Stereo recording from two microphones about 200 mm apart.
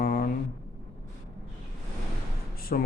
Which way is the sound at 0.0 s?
50° left (ahead or behind).